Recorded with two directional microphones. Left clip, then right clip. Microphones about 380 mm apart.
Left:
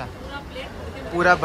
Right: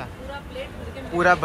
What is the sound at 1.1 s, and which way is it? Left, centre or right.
Speech, centre.